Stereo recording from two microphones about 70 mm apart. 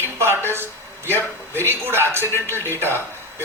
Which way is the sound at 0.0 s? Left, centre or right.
Right.